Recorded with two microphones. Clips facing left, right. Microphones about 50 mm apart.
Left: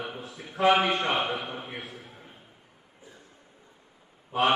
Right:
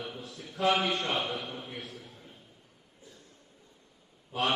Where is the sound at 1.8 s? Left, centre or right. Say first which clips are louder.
Left 2 dB; left.